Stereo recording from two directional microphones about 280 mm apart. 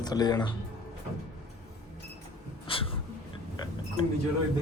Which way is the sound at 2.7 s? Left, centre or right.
Centre.